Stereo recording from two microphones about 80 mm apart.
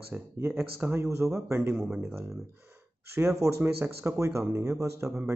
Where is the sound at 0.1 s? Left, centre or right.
Centre.